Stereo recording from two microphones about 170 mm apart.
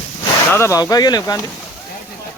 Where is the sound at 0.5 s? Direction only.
20° left (ahead or behind).